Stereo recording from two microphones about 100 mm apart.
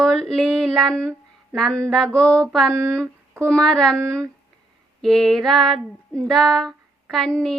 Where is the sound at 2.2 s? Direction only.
10° left (ahead or behind).